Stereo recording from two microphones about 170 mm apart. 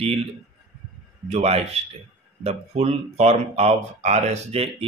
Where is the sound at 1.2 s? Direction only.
40° right (ahead or behind).